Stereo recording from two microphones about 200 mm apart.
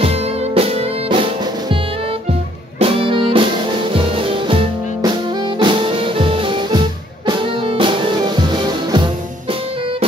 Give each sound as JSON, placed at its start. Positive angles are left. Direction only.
{"t": 0.0, "sound": "music", "side_deg": -30}
{"t": 2.8, "sound": "music", "side_deg": -25}